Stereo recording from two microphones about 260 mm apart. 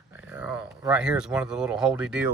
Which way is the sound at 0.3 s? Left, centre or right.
Centre.